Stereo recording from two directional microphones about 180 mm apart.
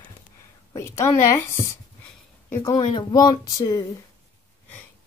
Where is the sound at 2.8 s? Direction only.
25° left (ahead or behind).